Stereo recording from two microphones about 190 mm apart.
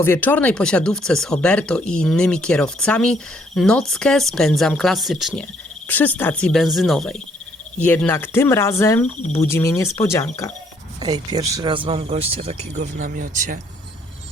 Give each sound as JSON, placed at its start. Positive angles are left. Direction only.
{"t": 0.0, "sound": "speech", "side_deg": 10}
{"t": 11.0, "sound": "speech", "side_deg": -20}